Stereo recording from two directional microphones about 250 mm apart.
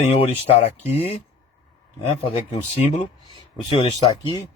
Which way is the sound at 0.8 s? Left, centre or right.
Left.